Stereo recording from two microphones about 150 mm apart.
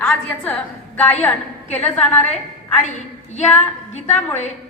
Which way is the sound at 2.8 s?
50° left (ahead or behind).